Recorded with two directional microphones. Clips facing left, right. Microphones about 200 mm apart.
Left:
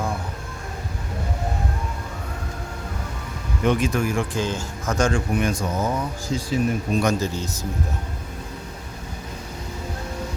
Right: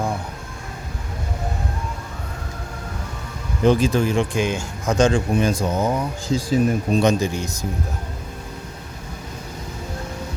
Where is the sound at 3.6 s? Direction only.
30° right (ahead or behind).